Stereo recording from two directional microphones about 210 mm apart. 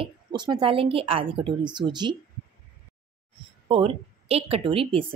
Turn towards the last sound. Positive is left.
turn(degrees=-25)  # may be behind; listen again after turning